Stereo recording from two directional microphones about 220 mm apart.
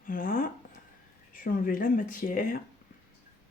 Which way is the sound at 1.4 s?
40° left (ahead or behind).